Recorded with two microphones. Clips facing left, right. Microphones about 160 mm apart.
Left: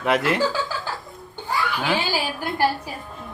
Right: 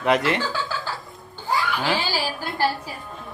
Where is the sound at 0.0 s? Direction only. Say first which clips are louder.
Even; centre (ahead or behind).